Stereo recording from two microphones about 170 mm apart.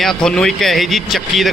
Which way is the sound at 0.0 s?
5° left (ahead or behind).